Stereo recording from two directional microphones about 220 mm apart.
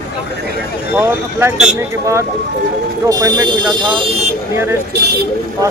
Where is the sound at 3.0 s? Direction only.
15° right (ahead or behind).